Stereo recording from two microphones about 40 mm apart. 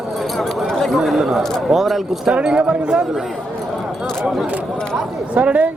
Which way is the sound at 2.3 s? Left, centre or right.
Right.